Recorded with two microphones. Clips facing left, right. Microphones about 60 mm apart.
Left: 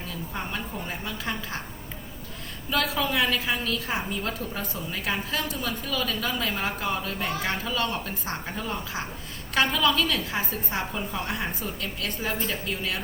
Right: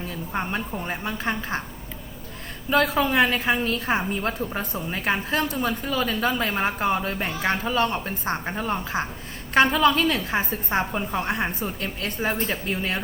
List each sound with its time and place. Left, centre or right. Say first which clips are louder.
0.1 s a sound: right 5 dB; right
0.9 s a woman's voice: right 5 dB; right
2.6 s a woman's voice: right 6 dB; right